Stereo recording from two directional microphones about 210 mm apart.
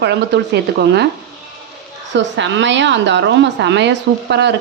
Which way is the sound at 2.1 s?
60° right (ahead or behind).